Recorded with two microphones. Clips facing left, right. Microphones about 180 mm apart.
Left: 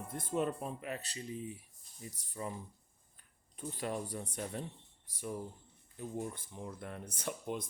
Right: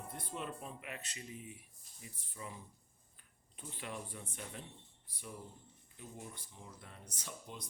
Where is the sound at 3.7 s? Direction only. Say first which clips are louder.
Left 7 dB; 40° left (ahead or behind); by 7.7 s 55° left (ahead or behind).